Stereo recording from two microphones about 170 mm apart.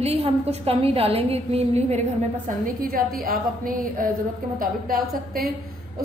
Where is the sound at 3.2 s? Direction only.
55° right (ahead or behind).